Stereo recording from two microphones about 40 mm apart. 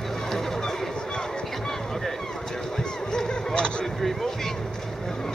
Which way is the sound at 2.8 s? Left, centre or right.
Centre.